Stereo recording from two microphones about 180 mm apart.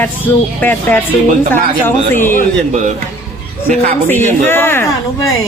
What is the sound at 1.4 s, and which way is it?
Speech, 45° right (ahead or behind).